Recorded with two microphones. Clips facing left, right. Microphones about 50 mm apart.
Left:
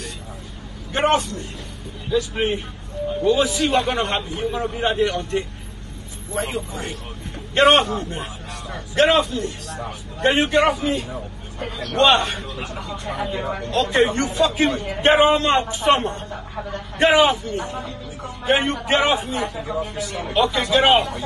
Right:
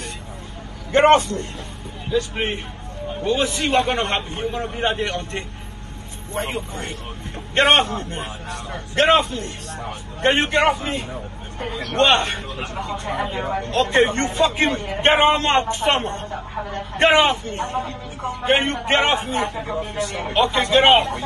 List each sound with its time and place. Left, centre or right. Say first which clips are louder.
0.9 s a man's voice: right 5 dB; right
2.4 s speech: left 2 dB; right
3.3 s a man's voice: left 2 dB; right
13.2 s a man's voice: left 1 dB; right